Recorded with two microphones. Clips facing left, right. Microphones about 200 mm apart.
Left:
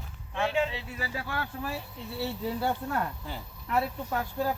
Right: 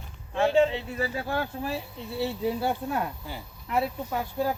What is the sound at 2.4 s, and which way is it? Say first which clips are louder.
Speech: right 2 dB; 15° right (ahead or behind).